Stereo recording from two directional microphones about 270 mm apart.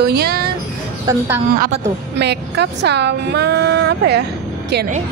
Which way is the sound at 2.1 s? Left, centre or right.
Right.